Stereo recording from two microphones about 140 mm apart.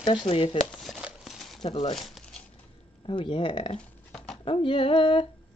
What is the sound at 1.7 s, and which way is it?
Speech, 45° left (ahead or behind).